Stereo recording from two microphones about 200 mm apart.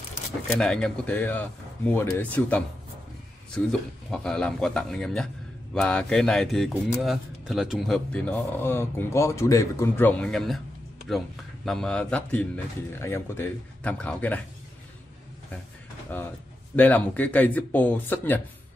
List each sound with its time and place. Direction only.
0.5 s a man's voice: 5° left (ahead or behind)
4.1 s a man's voice: 5° left (ahead or behind)
16.1 s a man's voice: 10° left (ahead or behind)